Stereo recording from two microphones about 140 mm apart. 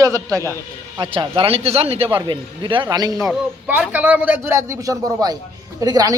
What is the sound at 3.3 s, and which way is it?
A man's voice, 10° right (ahead or behind).